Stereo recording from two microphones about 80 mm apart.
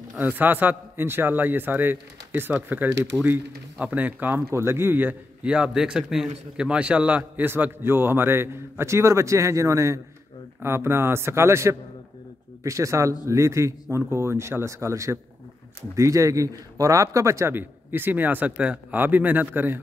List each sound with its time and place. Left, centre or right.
0.2 s a man's voice: right